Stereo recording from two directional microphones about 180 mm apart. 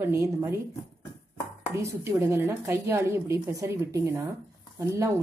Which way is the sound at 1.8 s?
15° right (ahead or behind).